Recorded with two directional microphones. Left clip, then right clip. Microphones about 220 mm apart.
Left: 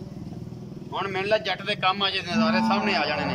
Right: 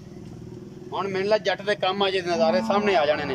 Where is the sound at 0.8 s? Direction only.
20° right (ahead or behind).